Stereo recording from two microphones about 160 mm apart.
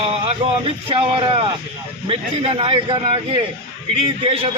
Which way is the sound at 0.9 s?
35° right (ahead or behind).